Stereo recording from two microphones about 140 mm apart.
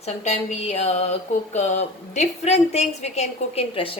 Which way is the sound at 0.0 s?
50° left (ahead or behind).